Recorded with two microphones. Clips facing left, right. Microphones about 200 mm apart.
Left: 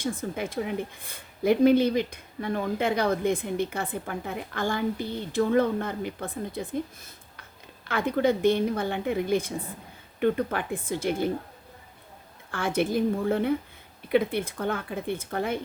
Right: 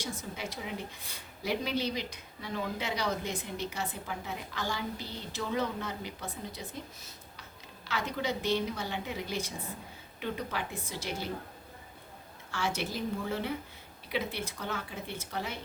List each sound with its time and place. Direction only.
0.0 s speech: 55° left (ahead or behind)
12.5 s speech: 55° left (ahead or behind)